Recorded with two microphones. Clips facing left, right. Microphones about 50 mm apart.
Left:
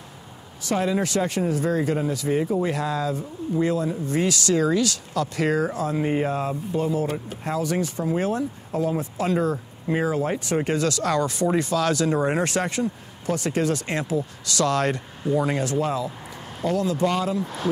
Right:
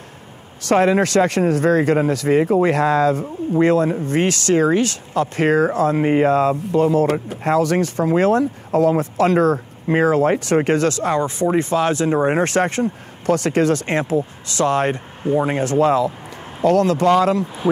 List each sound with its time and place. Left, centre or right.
0.7 s speech: right
10.9 s speech: right
12.4 s speech: right